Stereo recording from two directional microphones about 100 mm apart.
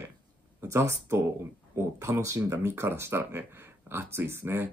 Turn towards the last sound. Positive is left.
turn(degrees=-25)  # may be behind; listen again after turning